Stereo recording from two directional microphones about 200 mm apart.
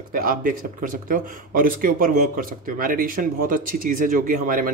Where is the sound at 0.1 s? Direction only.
45° right (ahead or behind).